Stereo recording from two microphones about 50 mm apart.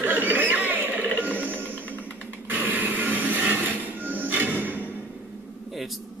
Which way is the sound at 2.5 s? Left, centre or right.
Right.